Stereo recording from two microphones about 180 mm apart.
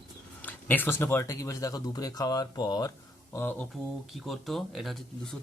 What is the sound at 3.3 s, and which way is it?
Speech, 10° left (ahead or behind).